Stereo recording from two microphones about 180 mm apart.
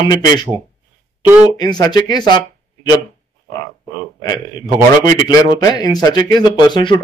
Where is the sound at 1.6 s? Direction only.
25° left (ahead or behind).